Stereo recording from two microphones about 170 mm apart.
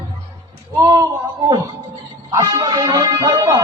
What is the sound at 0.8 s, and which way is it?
Speech, 20° right (ahead or behind).